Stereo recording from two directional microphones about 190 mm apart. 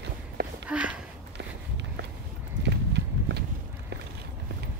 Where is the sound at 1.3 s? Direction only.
65° right (ahead or behind).